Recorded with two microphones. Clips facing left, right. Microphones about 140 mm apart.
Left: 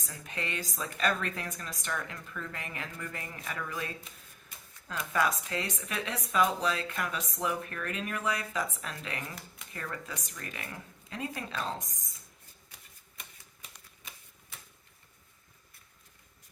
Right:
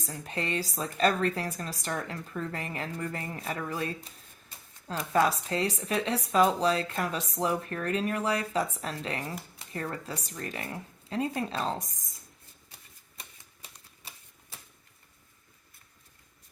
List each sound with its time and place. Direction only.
0.0 s speech: 35° right (ahead or behind)
13.1 s typewriter: 35° right (ahead or behind)